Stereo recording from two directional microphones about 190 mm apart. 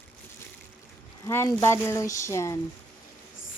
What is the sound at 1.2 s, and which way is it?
Speech, 15° left (ahead or behind).